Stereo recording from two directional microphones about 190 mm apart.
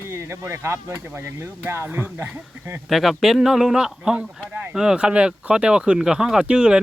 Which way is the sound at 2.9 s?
Centre (ahead or behind).